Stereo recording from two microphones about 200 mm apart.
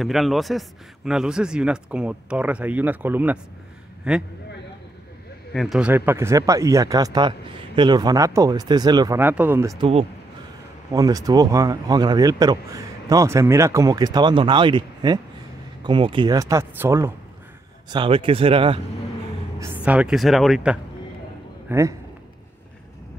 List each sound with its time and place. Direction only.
0.0 s speech: centre (ahead or behind)
5.5 s speech: centre (ahead or behind); by 9.2 s 20° right (ahead or behind)
9.2 s speech: 10° right (ahead or behind)
9.8 s speech: 30° right (ahead or behind)
10.9 s speech: 15° right (ahead or behind)
17.8 s speech: 25° right (ahead or behind)
19.6 s speech: 10° right (ahead or behind)
21.6 s a man's voice: 15° right (ahead or behind)